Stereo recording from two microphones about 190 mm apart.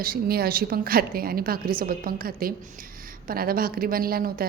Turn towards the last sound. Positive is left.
turn(degrees=-50)  # may be behind; listen again after turning